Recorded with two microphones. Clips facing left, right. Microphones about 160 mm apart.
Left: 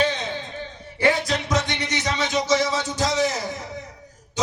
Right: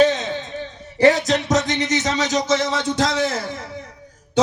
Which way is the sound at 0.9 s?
40° right (ahead or behind).